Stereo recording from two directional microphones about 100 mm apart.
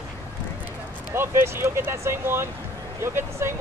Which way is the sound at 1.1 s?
25° right (ahead or behind).